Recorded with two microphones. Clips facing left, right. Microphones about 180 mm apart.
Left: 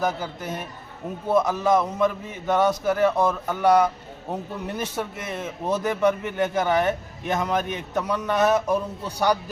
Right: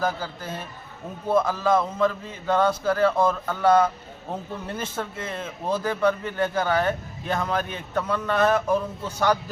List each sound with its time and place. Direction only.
0.0 s a man's voice: 20° left (ahead or behind)